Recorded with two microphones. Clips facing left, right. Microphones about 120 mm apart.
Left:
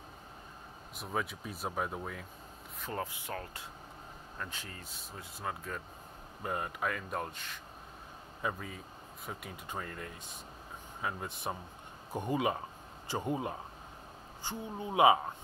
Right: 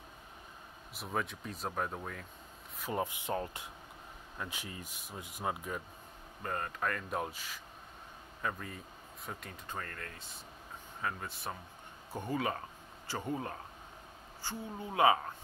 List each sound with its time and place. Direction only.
0.9 s speech: centre (ahead or behind)
2.8 s speech: 15° right (ahead or behind)
6.4 s speech: 10° left (ahead or behind)
8.4 s speech: 10° left (ahead or behind)
8.6 s speech: centre (ahead or behind); by 15.1 s 15° left (ahead or behind)